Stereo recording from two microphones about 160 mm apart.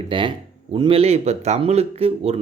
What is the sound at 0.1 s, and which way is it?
Speech, 30° right (ahead or behind).